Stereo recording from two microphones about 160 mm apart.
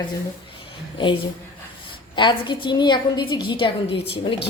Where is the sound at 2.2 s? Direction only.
30° left (ahead or behind).